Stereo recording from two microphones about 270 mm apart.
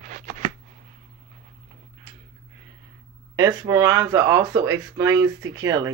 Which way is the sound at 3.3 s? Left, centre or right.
Centre.